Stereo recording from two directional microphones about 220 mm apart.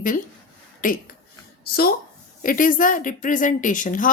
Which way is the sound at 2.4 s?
40° left (ahead or behind).